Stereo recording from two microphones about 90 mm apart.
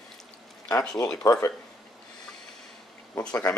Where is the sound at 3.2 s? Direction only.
10° left (ahead or behind).